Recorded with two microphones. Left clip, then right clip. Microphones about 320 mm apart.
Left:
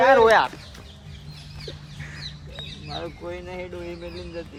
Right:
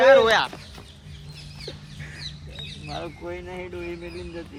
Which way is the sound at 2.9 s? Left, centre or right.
Centre.